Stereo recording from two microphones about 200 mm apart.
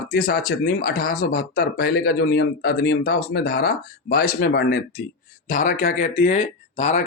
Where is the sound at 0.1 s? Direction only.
45° left (ahead or behind).